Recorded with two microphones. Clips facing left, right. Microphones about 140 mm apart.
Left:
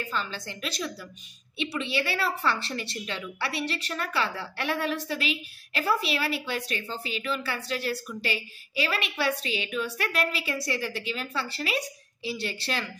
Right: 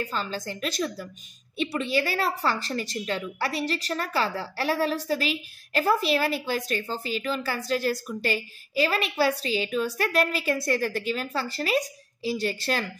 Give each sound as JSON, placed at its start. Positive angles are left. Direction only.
{"t": 0.0, "sound": "a woman's voice", "side_deg": -35}